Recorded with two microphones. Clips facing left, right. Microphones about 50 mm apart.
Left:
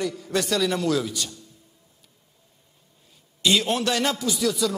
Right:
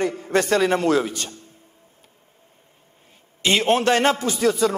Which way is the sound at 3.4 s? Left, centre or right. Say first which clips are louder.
Right 4 dB; right.